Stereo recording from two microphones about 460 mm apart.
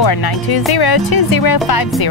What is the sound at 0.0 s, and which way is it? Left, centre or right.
Speech, left.